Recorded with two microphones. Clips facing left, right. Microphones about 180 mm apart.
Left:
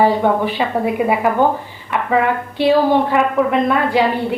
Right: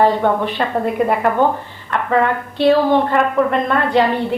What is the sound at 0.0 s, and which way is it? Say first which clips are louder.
A woman's voice: even; 5° left (ahead or behind).